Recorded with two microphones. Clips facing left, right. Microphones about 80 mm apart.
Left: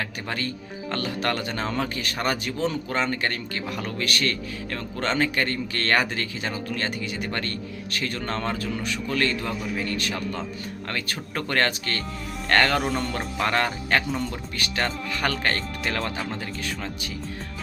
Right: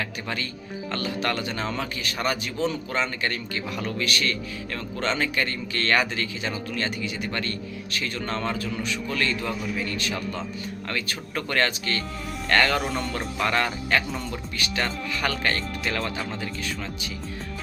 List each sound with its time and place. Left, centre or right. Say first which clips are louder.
0.0 s speech: left 1 dB; left
12.8 s speech: left 2 dB; centre
13.1 s speech: even; left